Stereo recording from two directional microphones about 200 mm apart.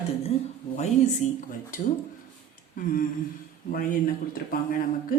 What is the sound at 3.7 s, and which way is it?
A man's voice, 45° left (ahead or behind).